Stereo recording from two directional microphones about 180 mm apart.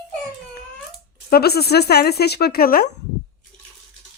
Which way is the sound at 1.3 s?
60° left (ahead or behind).